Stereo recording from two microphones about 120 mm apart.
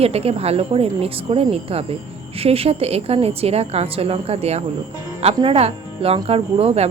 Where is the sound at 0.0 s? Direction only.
55° right (ahead or behind).